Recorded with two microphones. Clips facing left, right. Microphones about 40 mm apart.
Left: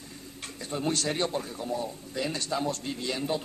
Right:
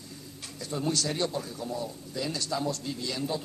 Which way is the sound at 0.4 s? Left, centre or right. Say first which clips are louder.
Left 1 dB; left.